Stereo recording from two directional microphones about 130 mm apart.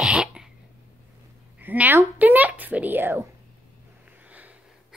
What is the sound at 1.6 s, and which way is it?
Speech, 15° right (ahead or behind).